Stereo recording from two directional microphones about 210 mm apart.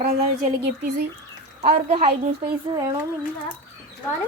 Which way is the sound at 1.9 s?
30° right (ahead or behind).